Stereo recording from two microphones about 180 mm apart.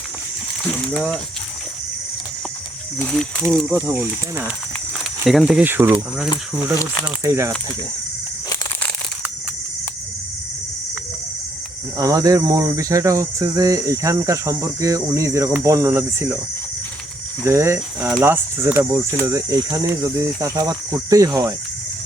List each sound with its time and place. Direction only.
3.0 s speech: 5° left (ahead or behind)
3.4 s speech: 10° right (ahead or behind)
7.0 s speech: 15° right (ahead or behind)
11.9 s speech: 20° right (ahead or behind)
17.4 s speech: 15° right (ahead or behind)